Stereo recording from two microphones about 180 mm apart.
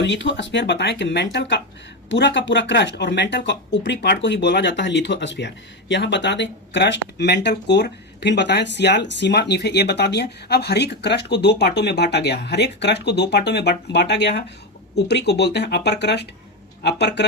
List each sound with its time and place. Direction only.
0.0 s speech: 85° left; by 17.2 s 70° left (ahead or behind)